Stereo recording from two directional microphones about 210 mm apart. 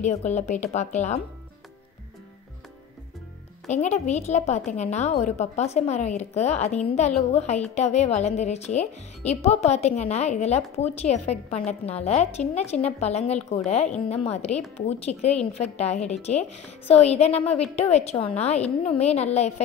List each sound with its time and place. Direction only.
0.0 s a woman's voice: 30° left (ahead or behind)
3.6 s a woman's voice: 35° left (ahead or behind)